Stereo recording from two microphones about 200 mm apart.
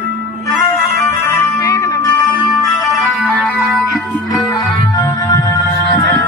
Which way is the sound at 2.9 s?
Centre (ahead or behind).